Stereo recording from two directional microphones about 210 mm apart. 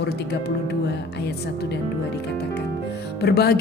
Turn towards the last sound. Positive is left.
turn(degrees=50)  # may be behind; listen again after turning